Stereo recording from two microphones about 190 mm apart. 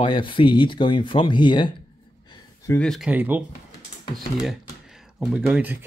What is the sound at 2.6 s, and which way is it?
Speech, 5° left (ahead or behind).